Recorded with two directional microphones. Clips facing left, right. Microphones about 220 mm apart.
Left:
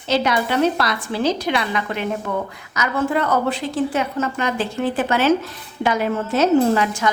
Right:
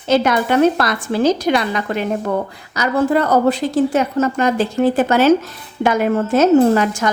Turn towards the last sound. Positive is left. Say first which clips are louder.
# right 4 dB
turn(degrees=-45)  # may be behind; listen again after turning